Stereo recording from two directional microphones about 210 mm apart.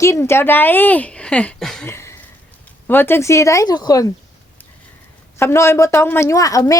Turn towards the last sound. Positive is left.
turn(degrees=15)  # may be behind; listen again after turning